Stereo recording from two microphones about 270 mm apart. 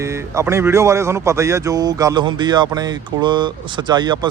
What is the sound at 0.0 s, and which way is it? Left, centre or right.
Speech, centre.